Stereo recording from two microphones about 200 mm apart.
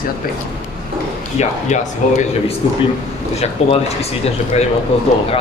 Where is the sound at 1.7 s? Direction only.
35° left (ahead or behind).